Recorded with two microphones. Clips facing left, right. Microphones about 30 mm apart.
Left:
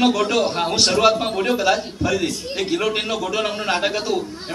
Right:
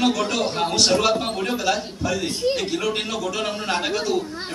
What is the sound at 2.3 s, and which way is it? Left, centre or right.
Speech, right.